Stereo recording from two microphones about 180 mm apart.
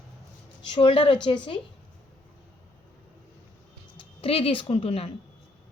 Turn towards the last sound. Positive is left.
turn(degrees=35)  # may be behind; listen again after turning